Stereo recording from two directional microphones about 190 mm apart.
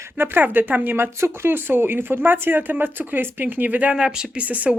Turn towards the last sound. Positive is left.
turn(degrees=-10)  # may be behind; listen again after turning